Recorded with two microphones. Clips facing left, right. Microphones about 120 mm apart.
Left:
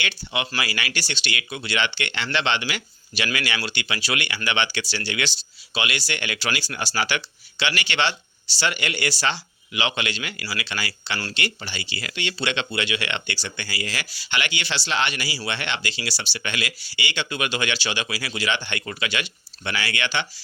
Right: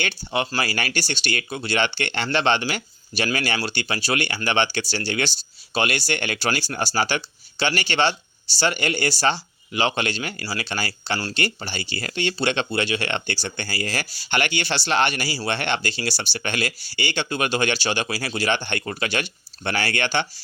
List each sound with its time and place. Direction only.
0.3 s speech: 45° right (ahead or behind)